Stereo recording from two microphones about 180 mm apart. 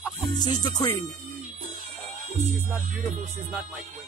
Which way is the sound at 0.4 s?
20° left (ahead or behind).